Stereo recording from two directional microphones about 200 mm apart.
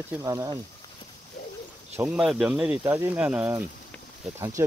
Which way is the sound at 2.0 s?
5° right (ahead or behind).